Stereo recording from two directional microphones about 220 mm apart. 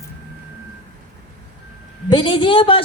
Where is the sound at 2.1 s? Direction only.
20° left (ahead or behind).